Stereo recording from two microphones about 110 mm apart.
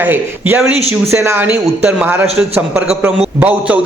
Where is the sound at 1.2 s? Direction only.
25° right (ahead or behind).